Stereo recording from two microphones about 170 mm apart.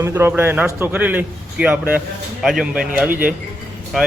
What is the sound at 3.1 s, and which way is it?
Speech, 55° right (ahead or behind).